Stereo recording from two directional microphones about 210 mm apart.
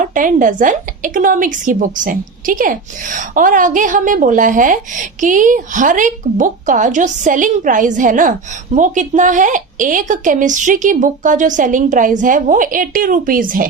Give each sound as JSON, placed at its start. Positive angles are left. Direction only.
{"t": 0.0, "sound": "a woman's voice", "side_deg": -40}